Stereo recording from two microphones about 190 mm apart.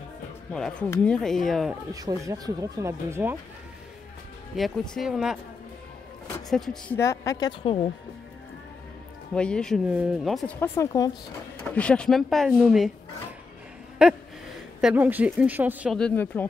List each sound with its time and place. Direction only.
0.5 s speech: 5° left (ahead or behind)
2.0 s speech: 20° right (ahead or behind)
4.6 s speech: centre (ahead or behind)
6.5 s speech: centre (ahead or behind)
7.0 s a woman's voice: 15° left (ahead or behind)
9.3 s speech: 5° left (ahead or behind)
11.6 s speech: 5° left (ahead or behind)
14.0 s speech: 5° right (ahead or behind)
16.0 s speech: 10° left (ahead or behind)